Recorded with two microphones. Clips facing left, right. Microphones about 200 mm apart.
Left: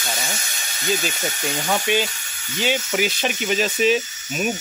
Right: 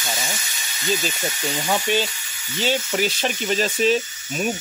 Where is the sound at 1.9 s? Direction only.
10° left (ahead or behind).